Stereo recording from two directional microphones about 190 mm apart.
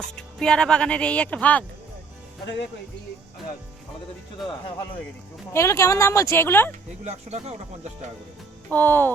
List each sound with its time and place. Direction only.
0.2 s speech: 5° left (ahead or behind)
4.4 s speech: centre (ahead or behind)
5.5 s speech: 15° left (ahead or behind)
7.0 s speech: 35° right (ahead or behind)
8.7 s speech: 10° left (ahead or behind)